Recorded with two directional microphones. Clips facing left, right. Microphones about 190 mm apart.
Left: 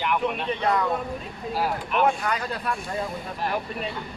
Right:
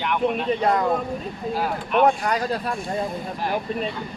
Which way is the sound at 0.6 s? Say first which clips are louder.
Right 2 dB; 35° right (ahead or behind).